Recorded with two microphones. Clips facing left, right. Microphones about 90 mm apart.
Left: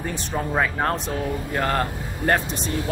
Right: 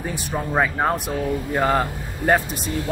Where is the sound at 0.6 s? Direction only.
10° right (ahead or behind).